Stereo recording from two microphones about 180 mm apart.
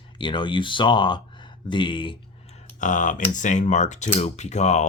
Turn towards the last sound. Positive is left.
turn(degrees=40)  # may be behind; listen again after turning